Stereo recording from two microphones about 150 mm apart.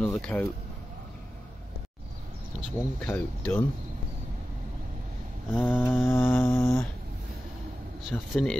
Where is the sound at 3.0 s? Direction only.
10° left (ahead or behind).